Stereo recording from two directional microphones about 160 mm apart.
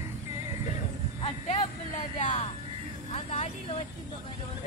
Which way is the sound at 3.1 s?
40° left (ahead or behind).